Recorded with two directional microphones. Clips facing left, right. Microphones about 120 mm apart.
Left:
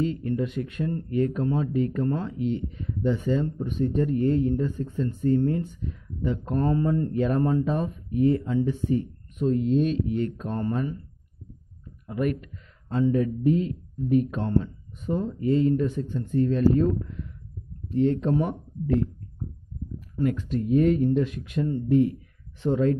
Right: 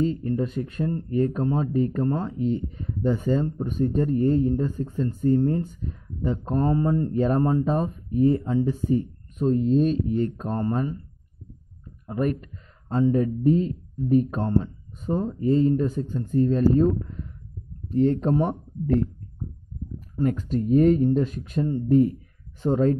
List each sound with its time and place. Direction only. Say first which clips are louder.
0.0 s speech: right 2 dB; 35° right (ahead or behind)
12.1 s speech: right 1 dB; 35° right (ahead or behind)
20.2 s speech: right 1 dB; 40° right (ahead or behind)